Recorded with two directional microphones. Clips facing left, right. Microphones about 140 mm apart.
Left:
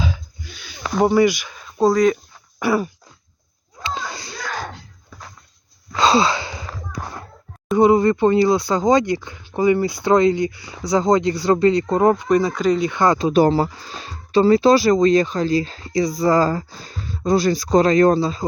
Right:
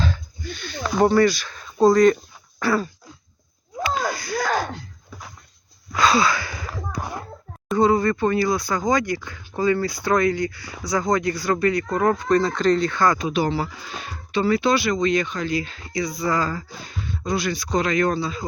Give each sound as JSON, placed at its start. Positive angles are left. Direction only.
{"t": 0.0, "sound": "a sound", "side_deg": 5}
{"t": 1.1, "sound": "speech", "side_deg": 15}
{"t": 2.6, "sound": "throat clearing", "side_deg": 15}
{"t": 3.8, "sound": "a sound", "side_deg": 25}
{"t": 6.0, "sound": "sigh", "side_deg": 30}
{"t": 7.8, "sound": "speech", "side_deg": 20}
{"t": 13.1, "sound": "speech", "side_deg": 35}